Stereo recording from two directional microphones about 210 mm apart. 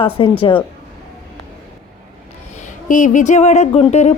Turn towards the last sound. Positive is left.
turn(degrees=30)  # may be behind; listen again after turning